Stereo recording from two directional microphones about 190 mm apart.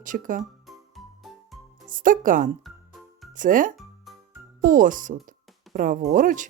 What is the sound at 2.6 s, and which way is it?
Music, centre (ahead or behind).